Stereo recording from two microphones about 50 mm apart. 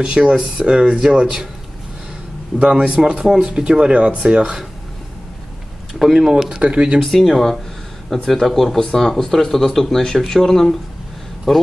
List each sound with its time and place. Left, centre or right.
0.0 s speech: centre
2.6 s speech: right
5.9 s speech: centre
6.3 s speech: centre
7.0 s speech: centre